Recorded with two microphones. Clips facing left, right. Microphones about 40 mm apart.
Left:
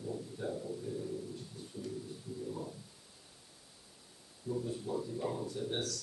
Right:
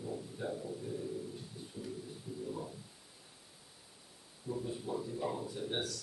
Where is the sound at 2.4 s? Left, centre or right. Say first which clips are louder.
Even; centre.